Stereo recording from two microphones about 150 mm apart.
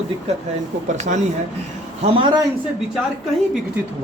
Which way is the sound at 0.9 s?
55° right (ahead or behind).